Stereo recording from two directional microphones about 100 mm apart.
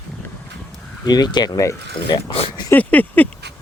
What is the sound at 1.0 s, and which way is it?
Speech, 45° left (ahead or behind).